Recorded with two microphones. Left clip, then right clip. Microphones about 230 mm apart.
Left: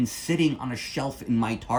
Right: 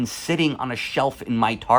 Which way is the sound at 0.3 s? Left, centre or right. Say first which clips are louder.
Right 4 dB; centre.